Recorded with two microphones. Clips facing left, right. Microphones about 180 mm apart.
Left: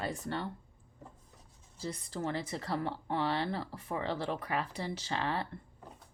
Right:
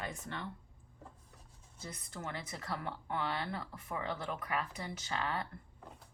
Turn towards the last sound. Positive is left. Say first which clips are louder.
# left 3 dB
turn(degrees=30)  # may be behind; listen again after turning